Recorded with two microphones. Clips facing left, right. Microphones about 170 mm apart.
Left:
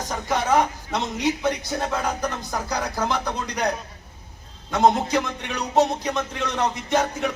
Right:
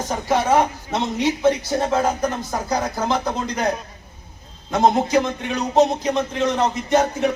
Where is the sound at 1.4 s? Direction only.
30° right (ahead or behind).